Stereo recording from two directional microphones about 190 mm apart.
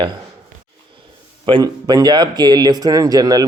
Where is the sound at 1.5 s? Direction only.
20° right (ahead or behind).